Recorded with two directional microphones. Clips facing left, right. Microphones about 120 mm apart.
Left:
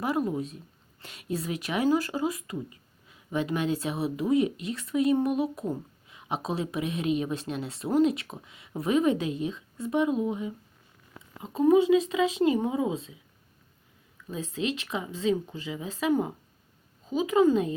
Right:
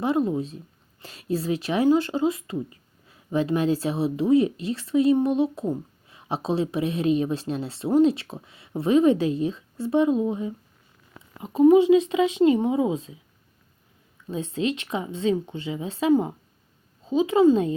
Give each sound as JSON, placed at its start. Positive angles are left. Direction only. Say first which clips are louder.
{"t": 0.0, "sound": "a woman's voice", "louder": "right 5 dB", "side_deg": -25}
{"t": 14.8, "sound": "a woman's voice", "louder": "right 4 dB", "side_deg": -30}